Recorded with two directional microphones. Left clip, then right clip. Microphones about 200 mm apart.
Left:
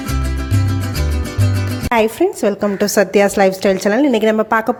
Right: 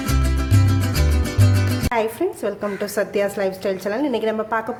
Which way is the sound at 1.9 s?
35° left (ahead or behind).